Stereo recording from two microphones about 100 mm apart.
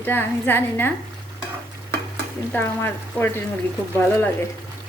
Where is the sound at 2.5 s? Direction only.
20° left (ahead or behind).